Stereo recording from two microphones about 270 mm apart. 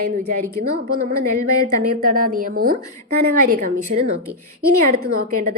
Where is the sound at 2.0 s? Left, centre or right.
Right.